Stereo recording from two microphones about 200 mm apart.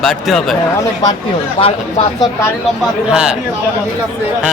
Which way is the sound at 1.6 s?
30° left (ahead or behind).